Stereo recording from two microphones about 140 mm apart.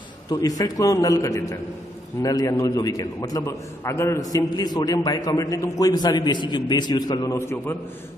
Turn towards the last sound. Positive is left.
turn(degrees=15)  # may be behind; listen again after turning